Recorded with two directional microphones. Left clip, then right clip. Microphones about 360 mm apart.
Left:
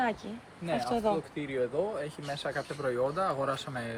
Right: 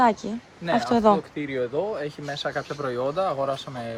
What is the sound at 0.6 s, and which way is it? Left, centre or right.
Speech, right.